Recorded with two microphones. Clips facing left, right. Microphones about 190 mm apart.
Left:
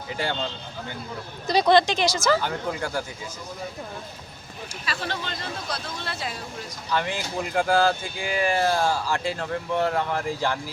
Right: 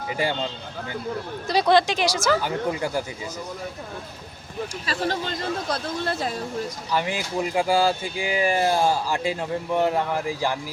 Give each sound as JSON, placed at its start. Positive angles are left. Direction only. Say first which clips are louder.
{"t": 1.5, "sound": "speech", "louder": "even", "side_deg": -5}
{"t": 4.9, "sound": "speech", "louder": "right 4 dB", "side_deg": -40}
{"t": 6.9, "sound": "speech", "louder": "right 1 dB", "side_deg": -10}